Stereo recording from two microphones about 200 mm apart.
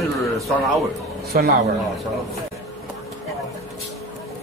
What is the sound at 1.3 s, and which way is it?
Speech, 45° right (ahead or behind).